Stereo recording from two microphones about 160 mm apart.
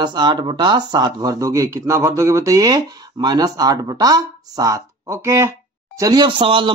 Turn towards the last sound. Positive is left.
turn(degrees=-30)  # may be behind; listen again after turning